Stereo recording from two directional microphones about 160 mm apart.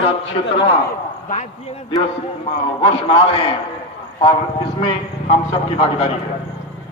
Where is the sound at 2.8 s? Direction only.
35° left (ahead or behind).